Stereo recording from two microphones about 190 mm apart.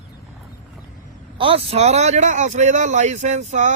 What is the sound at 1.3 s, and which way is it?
Speech, 30° right (ahead or behind).